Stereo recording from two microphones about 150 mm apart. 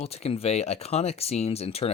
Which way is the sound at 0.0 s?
40° left (ahead or behind).